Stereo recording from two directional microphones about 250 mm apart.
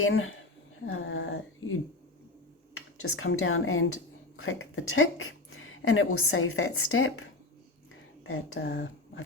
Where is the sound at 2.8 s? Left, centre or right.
Left.